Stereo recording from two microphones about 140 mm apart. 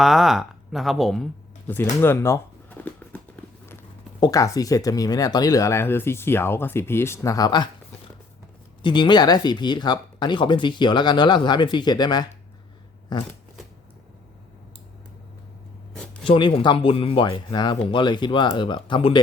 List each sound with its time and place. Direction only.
0.0 s speech: centre (ahead or behind)
1.6 s a sound: 15° left (ahead or behind)
4.2 s speech: 25° left (ahead or behind)
8.8 s speech: 35° left (ahead or behind)
16.2 s speech: 40° left (ahead or behind)